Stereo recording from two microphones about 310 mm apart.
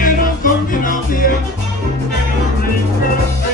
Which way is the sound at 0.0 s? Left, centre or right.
Left.